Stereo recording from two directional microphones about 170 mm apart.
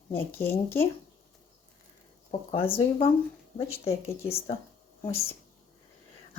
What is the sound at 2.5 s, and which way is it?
Speech, 35° left (ahead or behind).